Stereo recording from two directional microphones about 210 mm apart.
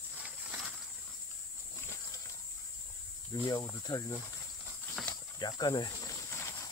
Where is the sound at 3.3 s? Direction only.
20° left (ahead or behind).